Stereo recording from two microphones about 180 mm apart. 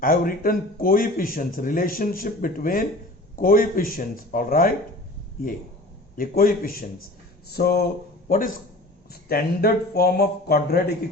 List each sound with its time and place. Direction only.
0.0 s speech: 55° left (ahead or behind)
6.1 s speech: 55° left (ahead or behind)
9.3 s speech: 60° left (ahead or behind)